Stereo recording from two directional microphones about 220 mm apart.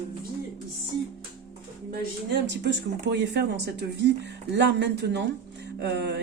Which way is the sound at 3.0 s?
50° right (ahead or behind).